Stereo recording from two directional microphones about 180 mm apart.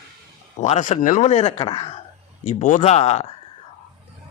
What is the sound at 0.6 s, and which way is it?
Speech, 40° left (ahead or behind).